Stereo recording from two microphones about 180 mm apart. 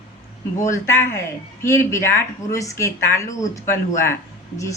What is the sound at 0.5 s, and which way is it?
Speech, 15° left (ahead or behind).